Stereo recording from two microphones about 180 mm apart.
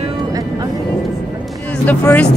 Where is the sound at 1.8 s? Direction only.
5° left (ahead or behind).